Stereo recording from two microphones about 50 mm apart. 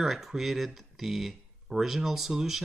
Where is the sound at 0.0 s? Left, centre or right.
Centre.